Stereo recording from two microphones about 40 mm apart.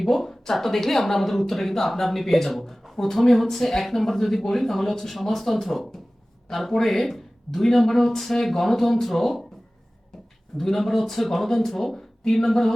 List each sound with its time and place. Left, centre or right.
0.0 s speech: centre
10.6 s speech: centre